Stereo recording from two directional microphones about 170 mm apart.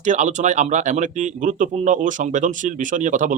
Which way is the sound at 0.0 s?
45° right (ahead or behind).